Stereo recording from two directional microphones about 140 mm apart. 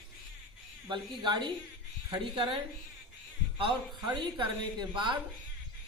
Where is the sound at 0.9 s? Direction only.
35° right (ahead or behind).